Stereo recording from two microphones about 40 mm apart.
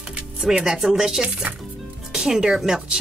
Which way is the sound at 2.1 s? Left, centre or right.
Centre.